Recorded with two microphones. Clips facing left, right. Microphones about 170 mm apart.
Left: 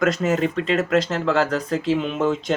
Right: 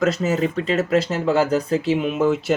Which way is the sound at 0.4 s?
35° right (ahead or behind).